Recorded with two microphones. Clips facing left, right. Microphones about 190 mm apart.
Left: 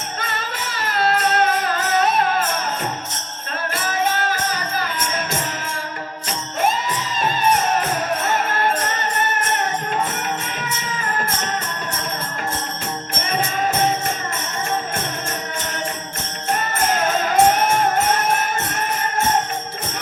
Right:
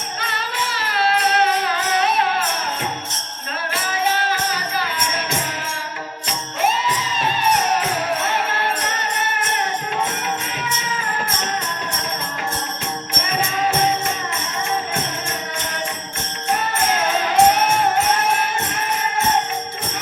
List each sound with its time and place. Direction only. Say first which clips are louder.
0.2 s music: right 2 dB; 45° left (ahead or behind)
3.8 s music: even; 45° left (ahead or behind)
6.6 s music: even; 45° left (ahead or behind)
8.2 s jingle bell: left 2 dB; 45° left (ahead or behind)
16.5 s music: even; 45° left (ahead or behind)